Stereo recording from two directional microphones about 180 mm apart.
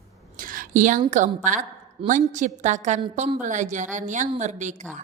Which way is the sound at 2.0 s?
45° right (ahead or behind).